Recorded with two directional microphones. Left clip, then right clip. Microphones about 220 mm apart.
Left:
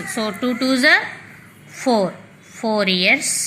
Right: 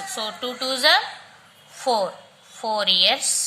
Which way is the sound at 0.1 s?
10° left (ahead or behind).